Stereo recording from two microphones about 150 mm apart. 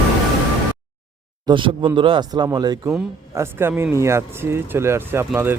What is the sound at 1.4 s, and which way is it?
Speech, 30° right (ahead or behind).